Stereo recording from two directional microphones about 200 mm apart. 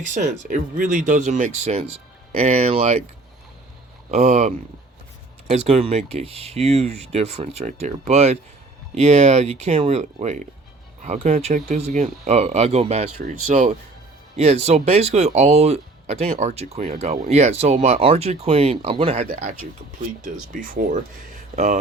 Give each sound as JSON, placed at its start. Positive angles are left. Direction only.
{"t": 0.0, "sound": "speech", "side_deg": -40}
{"t": 4.1, "sound": "speech", "side_deg": -35}
{"t": 20.5, "sound": "speech", "side_deg": -45}